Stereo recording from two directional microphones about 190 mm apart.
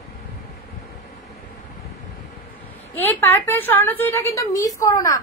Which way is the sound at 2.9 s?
10° left (ahead or behind).